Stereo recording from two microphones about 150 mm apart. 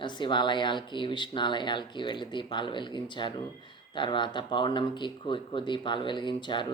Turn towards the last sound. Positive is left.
turn(degrees=30)  # may be behind; listen again after turning